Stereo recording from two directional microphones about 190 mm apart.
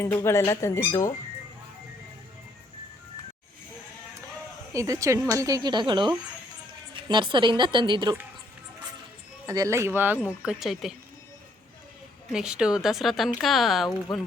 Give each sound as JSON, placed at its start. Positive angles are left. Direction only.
{"t": 0.0, "sound": "speech", "side_deg": 15}
{"t": 4.7, "sound": "a woman's voice", "side_deg": -15}
{"t": 9.5, "sound": "speech", "side_deg": -15}
{"t": 12.3, "sound": "speech", "side_deg": -5}